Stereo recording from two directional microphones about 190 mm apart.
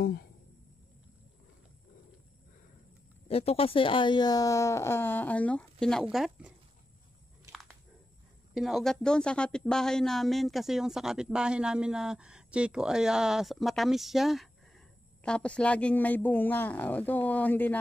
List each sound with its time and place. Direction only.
0.0 s speech: 55° left (ahead or behind)
3.3 s speech: 30° left (ahead or behind); by 6.5 s 5° right (ahead or behind)
8.5 s a woman's voice: centre (ahead or behind)